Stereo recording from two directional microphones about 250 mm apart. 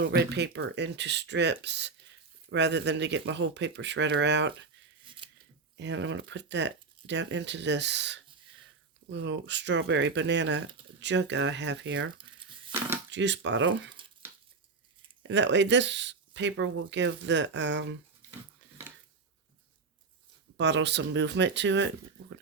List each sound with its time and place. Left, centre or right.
0.0 s speech: right
5.2 s scissors: centre
5.7 s speech: right
12.7 s dishes: centre
13.1 s speech: right
15.3 s speech: right
20.6 s speech: right